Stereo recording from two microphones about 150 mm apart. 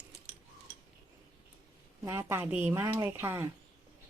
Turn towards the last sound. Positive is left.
turn(degrees=-15)  # may be behind; listen again after turning